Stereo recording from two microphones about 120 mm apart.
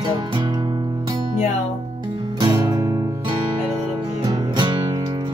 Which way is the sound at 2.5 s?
30° right (ahead or behind).